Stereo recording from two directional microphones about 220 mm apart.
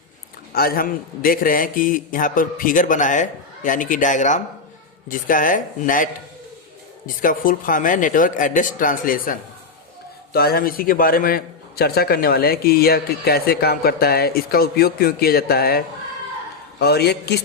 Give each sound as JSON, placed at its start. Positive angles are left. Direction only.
{"t": 0.5, "sound": "a man's voice", "side_deg": 40}
{"t": 7.2, "sound": "a man's voice", "side_deg": 40}
{"t": 16.8, "sound": "a man's voice", "side_deg": 45}